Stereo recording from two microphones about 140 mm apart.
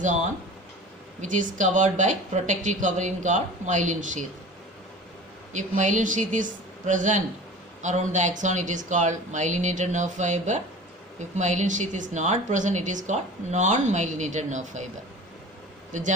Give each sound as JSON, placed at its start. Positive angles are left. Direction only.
{"t": 1.2, "sound": "a woman's voice", "side_deg": -65}
{"t": 5.5, "sound": "a woman's voice", "side_deg": -60}
{"t": 15.9, "sound": "a man's voice", "side_deg": -60}